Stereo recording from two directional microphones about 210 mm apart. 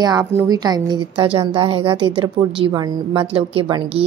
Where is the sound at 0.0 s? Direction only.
15° right (ahead or behind).